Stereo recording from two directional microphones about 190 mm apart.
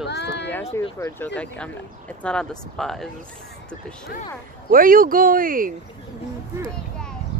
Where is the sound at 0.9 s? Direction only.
15° left (ahead or behind).